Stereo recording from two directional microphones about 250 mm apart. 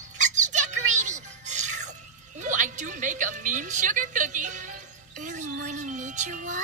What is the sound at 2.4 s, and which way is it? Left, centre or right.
A woman's voice, right.